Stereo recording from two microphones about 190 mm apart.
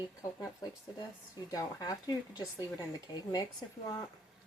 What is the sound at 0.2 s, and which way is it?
Speech, 20° left (ahead or behind).